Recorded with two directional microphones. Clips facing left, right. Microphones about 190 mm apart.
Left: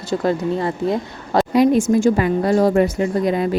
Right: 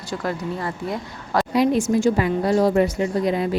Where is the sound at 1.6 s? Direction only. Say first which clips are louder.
Left 4 dB; 50° left (ahead or behind).